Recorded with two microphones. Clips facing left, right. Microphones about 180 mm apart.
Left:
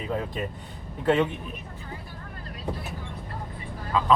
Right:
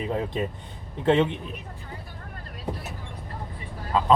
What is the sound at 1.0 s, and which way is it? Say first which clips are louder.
Speech: right 2 dB; 20° right (ahead or behind).